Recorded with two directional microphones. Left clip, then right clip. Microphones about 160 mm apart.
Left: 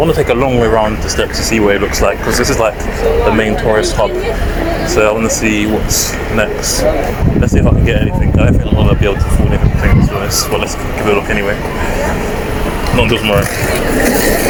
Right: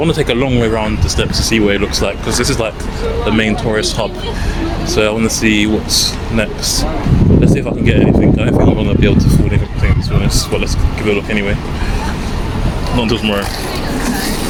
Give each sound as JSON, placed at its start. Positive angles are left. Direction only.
{"t": 0.0, "sound": "speech", "side_deg": -35}
{"t": 8.4, "sound": "speech", "side_deg": -40}
{"t": 11.1, "sound": "speech", "side_deg": -40}
{"t": 13.0, "sound": "speech", "side_deg": -20}